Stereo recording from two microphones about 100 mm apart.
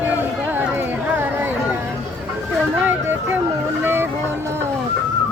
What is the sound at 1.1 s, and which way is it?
Chatter, 20° right (ahead or behind).